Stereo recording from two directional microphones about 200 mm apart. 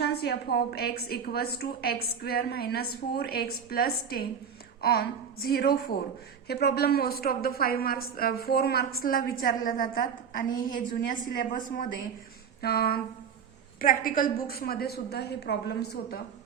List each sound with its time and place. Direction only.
0.0 s a woman's voice: 55° left (ahead or behind)
12.6 s a woman's voice: 50° left (ahead or behind)